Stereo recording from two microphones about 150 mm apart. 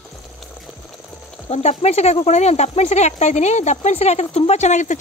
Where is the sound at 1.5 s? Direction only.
45° left (ahead or behind).